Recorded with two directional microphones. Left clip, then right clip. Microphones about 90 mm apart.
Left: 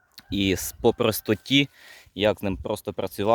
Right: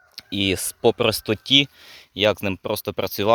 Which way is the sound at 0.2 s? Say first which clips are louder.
Right 2 dB; 50° left (ahead or behind).